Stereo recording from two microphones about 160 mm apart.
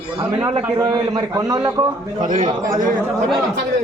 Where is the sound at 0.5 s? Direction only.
25° right (ahead or behind).